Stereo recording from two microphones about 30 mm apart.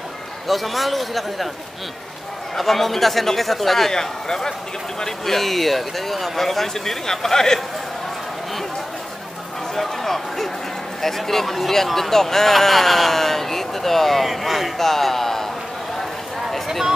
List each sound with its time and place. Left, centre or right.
0.5 s a man's voice: centre
2.5 s a man's voice: centre
3.9 s speech: centre
9.8 s speech: centre